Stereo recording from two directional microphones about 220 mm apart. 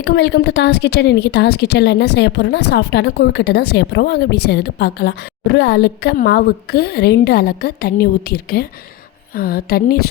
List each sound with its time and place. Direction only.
0.0 s a woman's voice: 50° left (ahead or behind)